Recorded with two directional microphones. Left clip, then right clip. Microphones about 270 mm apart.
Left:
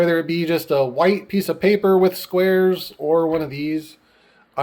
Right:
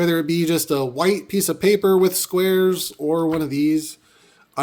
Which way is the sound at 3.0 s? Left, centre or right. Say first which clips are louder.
Left 2 dB; right.